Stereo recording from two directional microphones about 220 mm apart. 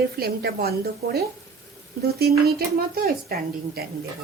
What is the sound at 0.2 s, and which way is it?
Speech, 45° right (ahead or behind).